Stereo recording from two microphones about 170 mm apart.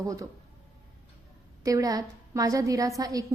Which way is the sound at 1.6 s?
20° right (ahead or behind).